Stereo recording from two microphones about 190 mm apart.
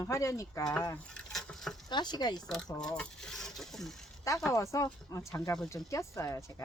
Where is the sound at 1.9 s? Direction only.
25° left (ahead or behind).